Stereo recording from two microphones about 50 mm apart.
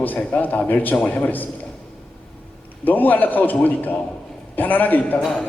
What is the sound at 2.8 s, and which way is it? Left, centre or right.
A man's voice, left.